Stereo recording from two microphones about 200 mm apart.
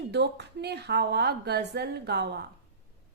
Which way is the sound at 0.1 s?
55° right (ahead or behind).